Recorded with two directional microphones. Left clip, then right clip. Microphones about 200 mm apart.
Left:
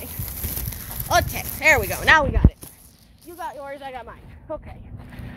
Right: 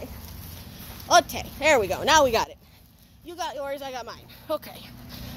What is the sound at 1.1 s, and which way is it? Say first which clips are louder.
Speech: right 1 dB; 20° right (ahead or behind).